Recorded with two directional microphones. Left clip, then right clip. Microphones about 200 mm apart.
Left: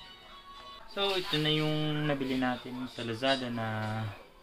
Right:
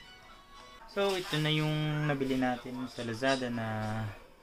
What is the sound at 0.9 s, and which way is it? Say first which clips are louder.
Speech: left 1 dB; 35° right (ahead or behind).